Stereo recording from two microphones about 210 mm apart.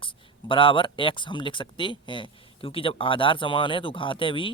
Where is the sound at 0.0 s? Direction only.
25° left (ahead or behind).